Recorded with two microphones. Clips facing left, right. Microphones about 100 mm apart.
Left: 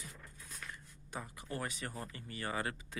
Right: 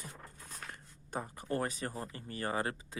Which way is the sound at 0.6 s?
50° right (ahead or behind).